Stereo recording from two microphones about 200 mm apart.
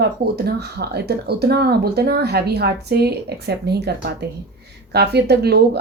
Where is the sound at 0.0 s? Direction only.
55° right (ahead or behind).